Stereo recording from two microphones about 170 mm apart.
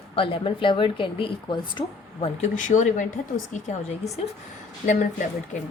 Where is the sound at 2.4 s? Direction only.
45° left (ahead or behind).